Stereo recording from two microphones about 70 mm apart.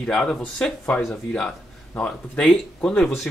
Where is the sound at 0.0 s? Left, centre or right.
Centre.